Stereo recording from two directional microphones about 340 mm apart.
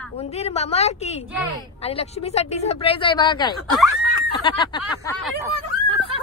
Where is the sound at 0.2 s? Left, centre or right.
Centre.